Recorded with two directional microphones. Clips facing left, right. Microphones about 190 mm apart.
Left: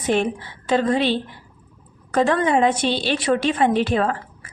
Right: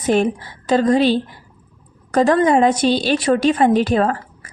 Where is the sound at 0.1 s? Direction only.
40° right (ahead or behind).